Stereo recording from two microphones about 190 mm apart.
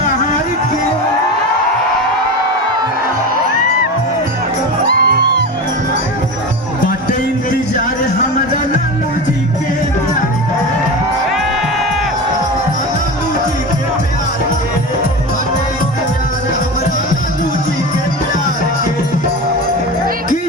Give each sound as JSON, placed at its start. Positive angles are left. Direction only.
{"t": 4.9, "sound": "music", "side_deg": -50}